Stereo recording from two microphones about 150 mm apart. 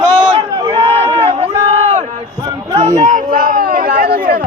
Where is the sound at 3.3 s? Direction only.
70° right (ahead or behind).